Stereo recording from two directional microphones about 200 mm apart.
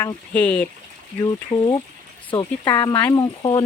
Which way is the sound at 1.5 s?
25° left (ahead or behind).